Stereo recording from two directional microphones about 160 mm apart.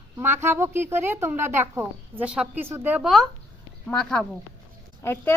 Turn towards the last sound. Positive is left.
turn(degrees=15)  # may be behind; listen again after turning